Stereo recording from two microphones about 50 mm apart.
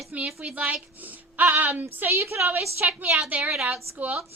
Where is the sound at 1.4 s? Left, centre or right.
Right.